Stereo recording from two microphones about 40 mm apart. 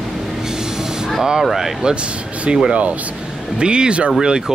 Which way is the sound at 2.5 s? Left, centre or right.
Right.